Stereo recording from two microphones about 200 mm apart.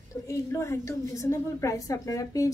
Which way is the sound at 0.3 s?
15° left (ahead or behind).